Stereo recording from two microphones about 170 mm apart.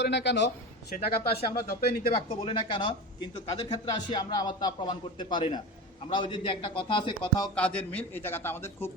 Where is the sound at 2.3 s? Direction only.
30° left (ahead or behind).